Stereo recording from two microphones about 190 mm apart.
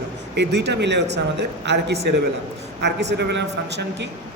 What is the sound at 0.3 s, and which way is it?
Speech, 65° right (ahead or behind).